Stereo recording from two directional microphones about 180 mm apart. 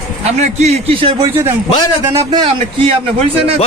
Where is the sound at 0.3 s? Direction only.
40° right (ahead or behind).